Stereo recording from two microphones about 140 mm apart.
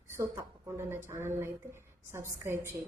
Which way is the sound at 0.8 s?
15° right (ahead or behind).